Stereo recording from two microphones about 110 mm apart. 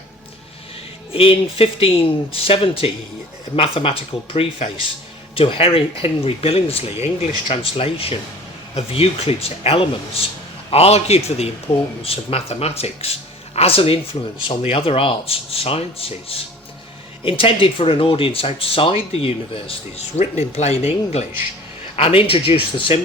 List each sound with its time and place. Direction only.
1.1 s a man's voice: 55° left (ahead or behind); by 21.2 s 80° left
21.9 s speech: 60° left (ahead or behind)